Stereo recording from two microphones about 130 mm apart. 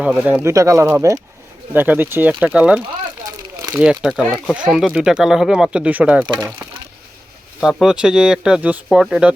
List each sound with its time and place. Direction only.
0.4 s speech: 25° right (ahead or behind)
3.2 s crumpling: 25° right (ahead or behind)
3.8 s speech: centre (ahead or behind)
6.2 s speech: 25° right (ahead or behind)
7.6 s speech: 5° right (ahead or behind)